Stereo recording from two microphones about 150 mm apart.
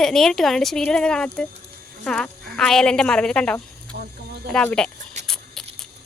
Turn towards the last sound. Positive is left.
turn(degrees=5)  # may be behind; listen again after turning